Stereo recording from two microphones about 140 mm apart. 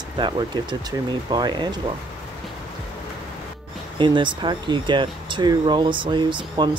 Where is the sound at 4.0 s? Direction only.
35° right (ahead or behind).